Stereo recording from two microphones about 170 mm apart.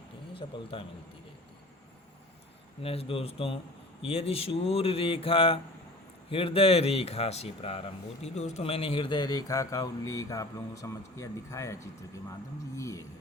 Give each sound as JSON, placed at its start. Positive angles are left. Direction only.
{"t": 0.3, "sound": "speech", "side_deg": 30}
{"t": 2.8, "sound": "speech", "side_deg": 35}